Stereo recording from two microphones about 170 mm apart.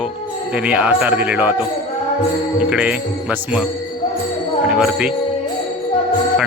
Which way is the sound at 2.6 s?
5° right (ahead or behind).